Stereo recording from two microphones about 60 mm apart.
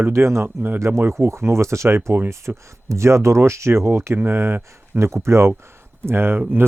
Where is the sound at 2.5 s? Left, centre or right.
Right.